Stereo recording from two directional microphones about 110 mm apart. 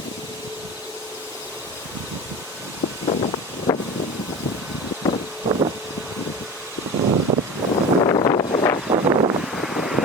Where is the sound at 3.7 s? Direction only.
30° left (ahead or behind).